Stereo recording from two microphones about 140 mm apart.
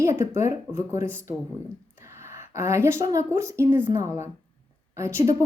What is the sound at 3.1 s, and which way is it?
Speech, 20° right (ahead or behind).